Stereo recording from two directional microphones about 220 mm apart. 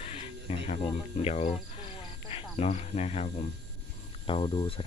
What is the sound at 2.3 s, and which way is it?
Cricket, 30° left (ahead or behind).